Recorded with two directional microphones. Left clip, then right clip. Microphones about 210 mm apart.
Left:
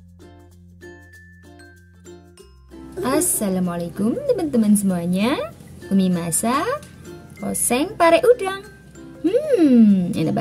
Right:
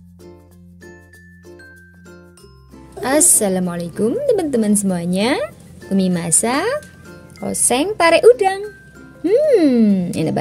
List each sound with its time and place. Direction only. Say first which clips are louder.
3.0 s a woman's voice: right 5 dB; 35° right (ahead or behind)